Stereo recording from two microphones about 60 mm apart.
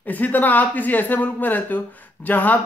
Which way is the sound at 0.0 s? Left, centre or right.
Left.